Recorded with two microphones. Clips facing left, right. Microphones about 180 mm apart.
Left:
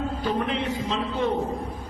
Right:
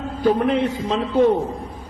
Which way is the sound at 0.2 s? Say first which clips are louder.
Right 12 dB; 45° right (ahead or behind).